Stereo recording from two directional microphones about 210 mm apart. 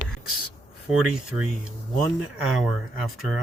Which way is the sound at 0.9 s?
5° right (ahead or behind).